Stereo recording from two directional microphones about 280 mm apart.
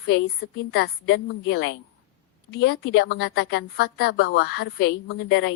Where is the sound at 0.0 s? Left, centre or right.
Left.